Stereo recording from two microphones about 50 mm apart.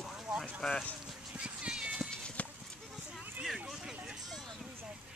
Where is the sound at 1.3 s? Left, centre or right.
Right.